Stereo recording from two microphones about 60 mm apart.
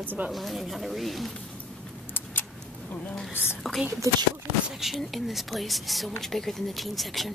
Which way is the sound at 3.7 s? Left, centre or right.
Centre.